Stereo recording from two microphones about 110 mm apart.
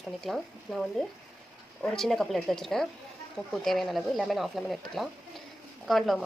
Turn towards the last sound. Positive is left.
turn(degrees=0)  # may be behind; listen again after turning